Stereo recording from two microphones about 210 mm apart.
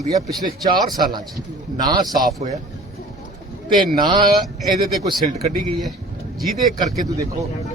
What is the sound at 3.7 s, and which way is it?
Speech, 45° right (ahead or behind).